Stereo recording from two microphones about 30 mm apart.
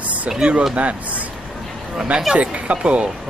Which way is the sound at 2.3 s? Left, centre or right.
Right.